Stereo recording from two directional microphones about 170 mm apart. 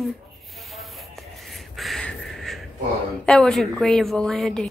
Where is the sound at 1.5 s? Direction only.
Centre (ahead or behind).